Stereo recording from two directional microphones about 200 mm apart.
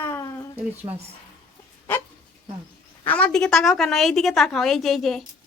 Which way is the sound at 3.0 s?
5° left (ahead or behind).